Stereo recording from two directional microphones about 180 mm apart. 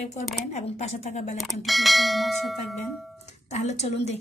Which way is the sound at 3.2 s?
40° left (ahead or behind).